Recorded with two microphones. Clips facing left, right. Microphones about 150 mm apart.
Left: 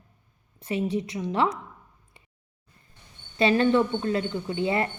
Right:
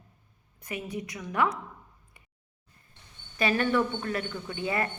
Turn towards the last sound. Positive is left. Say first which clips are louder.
# left 5 dB
turn(degrees=25)  # may be behind; listen again after turning